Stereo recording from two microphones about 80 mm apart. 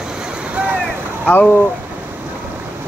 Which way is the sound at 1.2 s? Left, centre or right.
Centre.